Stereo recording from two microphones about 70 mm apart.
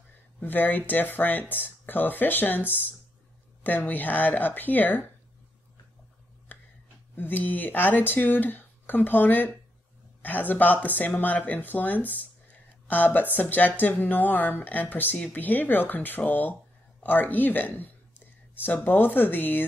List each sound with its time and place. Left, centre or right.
0.4 s speech: left
6.5 s a sound: left
7.2 s speech: left